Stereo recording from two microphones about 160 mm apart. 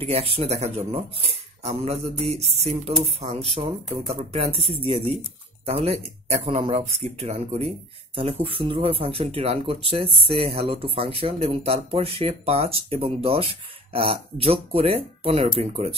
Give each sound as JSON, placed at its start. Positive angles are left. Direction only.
{"t": 0.0, "sound": "speech", "side_deg": -40}